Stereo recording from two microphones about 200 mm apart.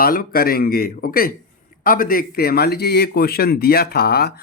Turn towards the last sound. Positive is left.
turn(degrees=50)  # may be behind; listen again after turning